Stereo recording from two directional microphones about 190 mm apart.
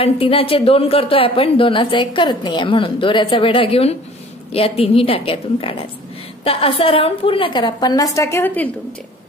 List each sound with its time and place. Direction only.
0.0 s a woman's voice: 30° left (ahead or behind); by 8.6 s 10° left (ahead or behind)